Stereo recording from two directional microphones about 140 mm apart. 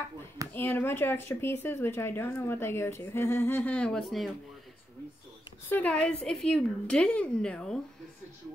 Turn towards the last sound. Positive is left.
turn(degrees=5)  # may be behind; listen again after turning